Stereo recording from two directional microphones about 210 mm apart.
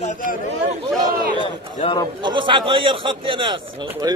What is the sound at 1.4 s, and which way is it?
Speech, 25° left (ahead or behind).